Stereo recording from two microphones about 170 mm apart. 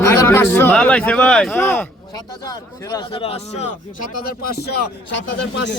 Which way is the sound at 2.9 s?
35° left (ahead or behind).